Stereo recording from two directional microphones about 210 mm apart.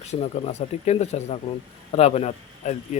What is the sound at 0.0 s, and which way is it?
A man's voice, 30° left (ahead or behind).